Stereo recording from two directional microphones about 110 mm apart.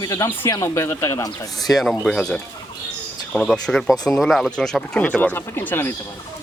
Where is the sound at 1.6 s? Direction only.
Centre (ahead or behind); by 5.9 s 20° left (ahead or behind).